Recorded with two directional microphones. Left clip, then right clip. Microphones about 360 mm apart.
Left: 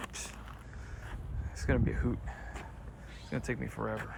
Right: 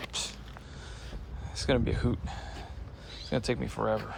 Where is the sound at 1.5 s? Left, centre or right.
Centre.